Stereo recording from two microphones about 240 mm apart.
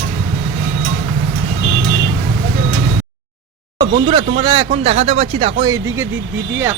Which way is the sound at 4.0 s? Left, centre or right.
Centre.